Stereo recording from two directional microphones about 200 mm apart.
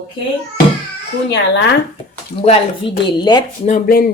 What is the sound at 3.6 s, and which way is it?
Speech, 45° left (ahead or behind).